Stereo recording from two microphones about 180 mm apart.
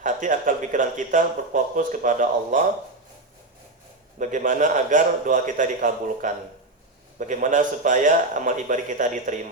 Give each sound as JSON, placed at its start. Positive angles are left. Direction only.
{"t": 0.0, "sound": "speech", "side_deg": -45}
{"t": 4.2, "sound": "speech", "side_deg": -45}